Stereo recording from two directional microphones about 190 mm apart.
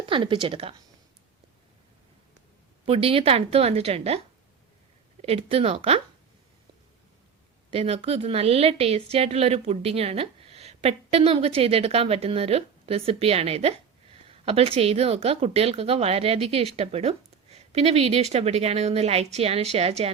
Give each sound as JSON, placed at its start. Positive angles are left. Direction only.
{"t": 0.0, "sound": "a woman's voice", "side_deg": -25}
{"t": 2.8, "sound": "a woman's voice", "side_deg": -30}
{"t": 5.2, "sound": "a woman's voice", "side_deg": -30}
{"t": 7.7, "sound": "a woman's voice", "side_deg": -30}